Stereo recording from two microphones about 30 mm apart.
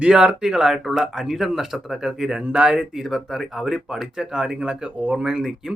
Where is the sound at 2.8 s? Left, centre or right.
Centre.